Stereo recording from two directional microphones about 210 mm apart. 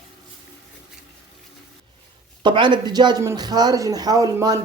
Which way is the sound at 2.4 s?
20° right (ahead or behind).